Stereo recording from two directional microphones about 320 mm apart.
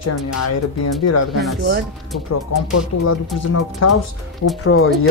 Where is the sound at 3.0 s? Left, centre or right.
Left.